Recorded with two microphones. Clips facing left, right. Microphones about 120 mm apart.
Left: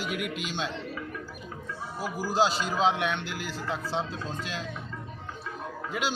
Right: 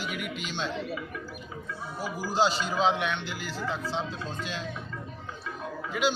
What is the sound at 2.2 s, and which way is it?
Speech, 5° left (ahead or behind).